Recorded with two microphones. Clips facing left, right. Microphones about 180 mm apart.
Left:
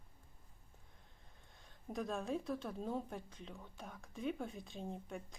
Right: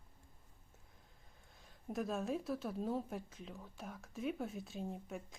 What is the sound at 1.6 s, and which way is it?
Speech, centre (ahead or behind).